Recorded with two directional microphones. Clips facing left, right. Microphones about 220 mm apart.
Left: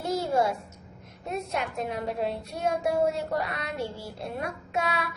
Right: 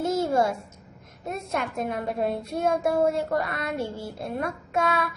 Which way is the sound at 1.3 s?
50° right (ahead or behind).